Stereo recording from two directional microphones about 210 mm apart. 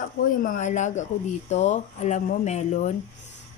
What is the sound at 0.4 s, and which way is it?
A woman's voice, 40° left (ahead or behind).